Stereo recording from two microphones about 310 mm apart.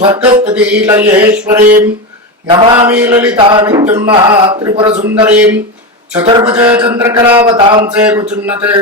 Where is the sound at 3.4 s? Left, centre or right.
Centre.